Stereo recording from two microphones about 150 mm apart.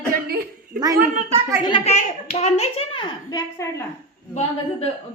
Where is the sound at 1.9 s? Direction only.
50° left (ahead or behind).